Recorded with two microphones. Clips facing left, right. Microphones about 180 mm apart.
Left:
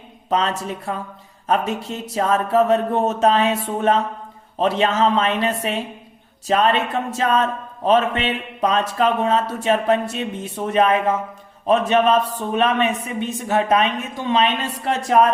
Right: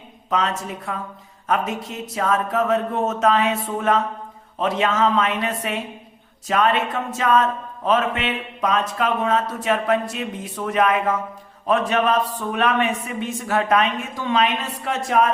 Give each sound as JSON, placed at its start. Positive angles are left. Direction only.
{"t": 0.3, "sound": "speech", "side_deg": 30}